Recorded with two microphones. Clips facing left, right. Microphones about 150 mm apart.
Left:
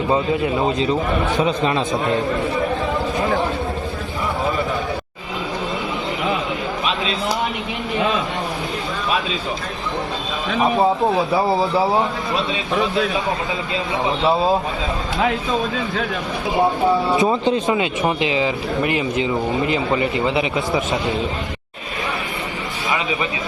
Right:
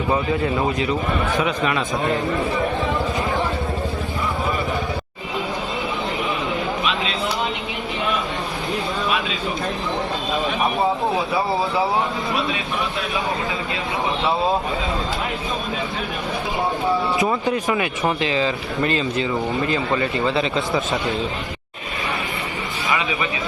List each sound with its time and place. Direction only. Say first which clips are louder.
0.1 s speech: left 2 dB; 25° left (ahead or behind)
17.2 s speech: left 3 dB; 25° left (ahead or behind)